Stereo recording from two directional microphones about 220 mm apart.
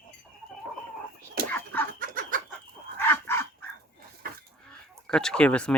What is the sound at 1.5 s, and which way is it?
Chicken, 10° left (ahead or behind).